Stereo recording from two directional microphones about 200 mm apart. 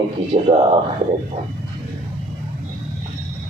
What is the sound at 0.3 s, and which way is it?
Speech, 30° right (ahead or behind).